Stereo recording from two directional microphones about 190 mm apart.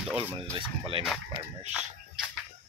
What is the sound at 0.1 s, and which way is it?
Speech, 10° right (ahead or behind).